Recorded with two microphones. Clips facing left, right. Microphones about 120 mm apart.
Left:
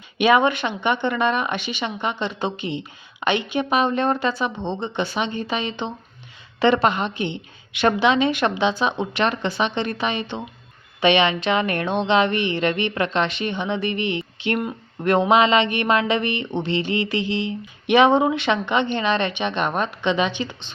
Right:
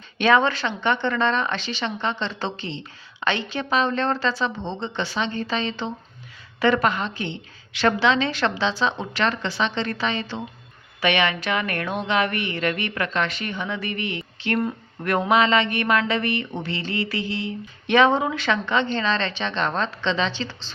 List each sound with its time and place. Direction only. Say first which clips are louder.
0.2 s speech: left 2 dB; 15° left (ahead or behind)